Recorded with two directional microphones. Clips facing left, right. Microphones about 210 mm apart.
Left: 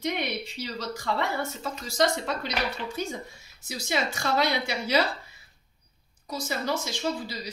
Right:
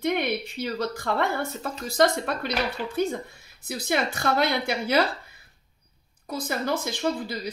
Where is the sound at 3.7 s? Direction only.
55° right (ahead or behind).